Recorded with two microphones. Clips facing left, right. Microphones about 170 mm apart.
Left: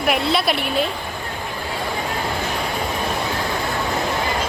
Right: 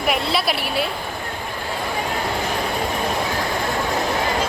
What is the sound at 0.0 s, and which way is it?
Speech, centre (ahead or behind).